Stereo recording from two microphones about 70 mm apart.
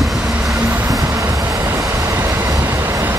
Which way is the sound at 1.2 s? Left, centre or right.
Right.